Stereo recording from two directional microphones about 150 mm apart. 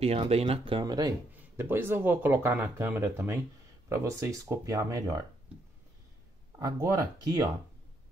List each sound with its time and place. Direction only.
0.0 s speech: 40° right (ahead or behind)
1.3 s speech: 15° right (ahead or behind)
6.6 s speech: 25° right (ahead or behind)